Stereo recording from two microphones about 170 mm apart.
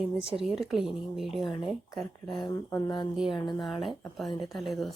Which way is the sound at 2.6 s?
15° left (ahead or behind).